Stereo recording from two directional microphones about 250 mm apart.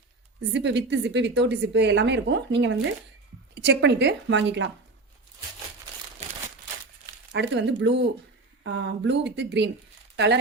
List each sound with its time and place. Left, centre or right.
0.5 s speech: right
7.3 s speech: right